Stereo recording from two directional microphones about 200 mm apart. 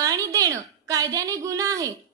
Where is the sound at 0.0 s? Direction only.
15° right (ahead or behind).